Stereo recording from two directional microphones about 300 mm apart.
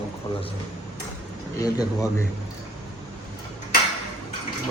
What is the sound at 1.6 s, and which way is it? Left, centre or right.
Speech, centre.